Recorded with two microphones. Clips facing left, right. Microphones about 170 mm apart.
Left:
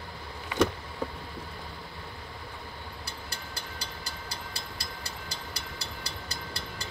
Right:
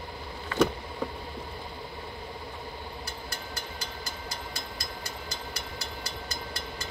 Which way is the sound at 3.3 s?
35° left (ahead or behind).